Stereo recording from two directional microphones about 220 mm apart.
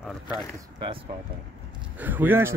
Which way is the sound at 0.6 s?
25° right (ahead or behind).